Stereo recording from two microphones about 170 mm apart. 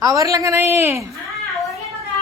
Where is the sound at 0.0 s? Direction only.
20° right (ahead or behind).